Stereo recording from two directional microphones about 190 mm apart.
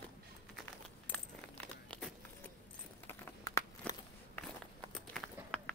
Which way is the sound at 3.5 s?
10° left (ahead or behind).